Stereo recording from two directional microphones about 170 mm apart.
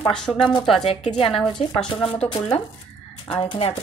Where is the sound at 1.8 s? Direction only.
5° left (ahead or behind).